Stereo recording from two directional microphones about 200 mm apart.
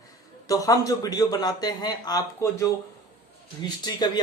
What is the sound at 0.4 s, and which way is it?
A man's voice, 15° left (ahead or behind).